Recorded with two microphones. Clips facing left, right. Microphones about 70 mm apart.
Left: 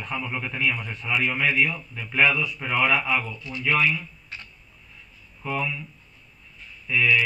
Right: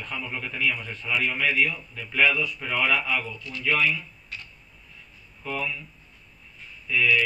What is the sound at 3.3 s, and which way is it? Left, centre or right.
Speech, left.